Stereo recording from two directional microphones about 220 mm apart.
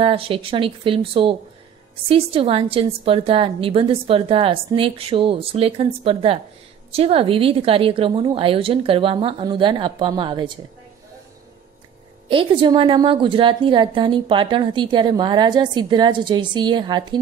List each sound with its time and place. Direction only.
0.0 s a woman's voice: 25° right (ahead or behind)
12.3 s a woman's voice: 25° right (ahead or behind)